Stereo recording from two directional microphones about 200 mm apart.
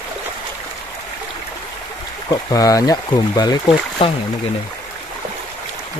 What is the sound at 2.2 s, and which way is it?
Speech, 20° left (ahead or behind).